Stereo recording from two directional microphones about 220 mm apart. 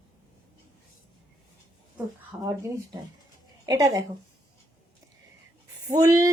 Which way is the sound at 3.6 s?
15° right (ahead or behind).